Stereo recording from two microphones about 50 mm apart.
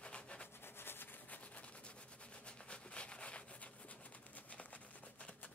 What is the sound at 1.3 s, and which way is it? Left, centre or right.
Rub, left.